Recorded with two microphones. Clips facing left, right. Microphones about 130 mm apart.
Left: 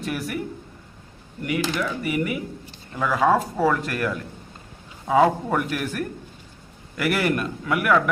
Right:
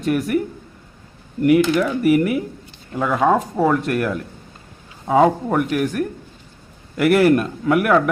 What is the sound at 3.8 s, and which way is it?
Speech, centre (ahead or behind).